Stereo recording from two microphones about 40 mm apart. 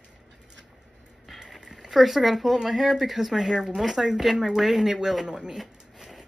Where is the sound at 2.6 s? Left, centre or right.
Centre.